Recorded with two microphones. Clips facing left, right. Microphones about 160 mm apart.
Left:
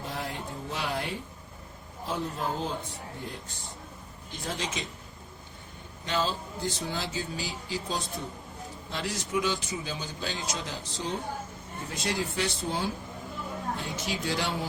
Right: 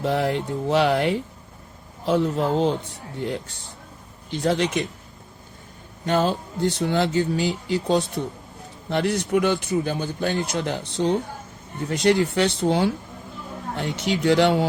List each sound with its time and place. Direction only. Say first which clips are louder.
0.0 s speech: right 13 dB; 75° right (ahead or behind)
6.1 s speech: right 8 dB; 55° right (ahead or behind)